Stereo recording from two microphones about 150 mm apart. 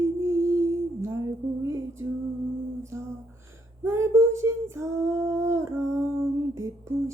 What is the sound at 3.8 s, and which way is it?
Female singing, 15° right (ahead or behind).